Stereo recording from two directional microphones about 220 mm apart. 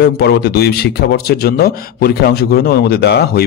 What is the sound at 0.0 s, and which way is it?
A man's voice, 50° left (ahead or behind).